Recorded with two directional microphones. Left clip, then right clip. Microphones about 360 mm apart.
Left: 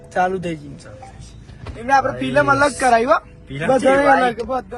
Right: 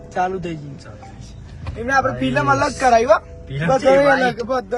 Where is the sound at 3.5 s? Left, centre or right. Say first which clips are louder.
Left 1 dB; centre.